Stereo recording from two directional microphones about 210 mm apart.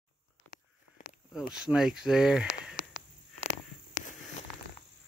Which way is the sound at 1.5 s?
5° right (ahead or behind).